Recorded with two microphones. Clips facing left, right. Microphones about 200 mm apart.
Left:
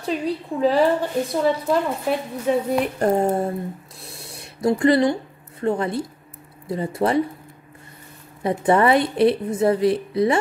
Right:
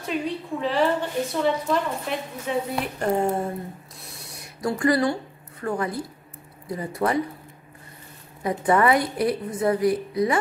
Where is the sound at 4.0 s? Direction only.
30° left (ahead or behind).